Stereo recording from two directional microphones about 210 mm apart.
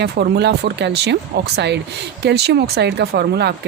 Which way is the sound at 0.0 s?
50° right (ahead or behind).